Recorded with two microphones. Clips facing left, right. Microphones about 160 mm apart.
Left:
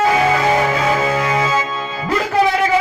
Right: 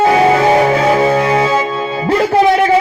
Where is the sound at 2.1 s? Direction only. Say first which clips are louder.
Right 6 dB; 30° right (ahead or behind).